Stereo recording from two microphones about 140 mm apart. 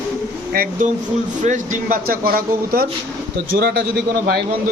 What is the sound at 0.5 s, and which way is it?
Speech, 90° right.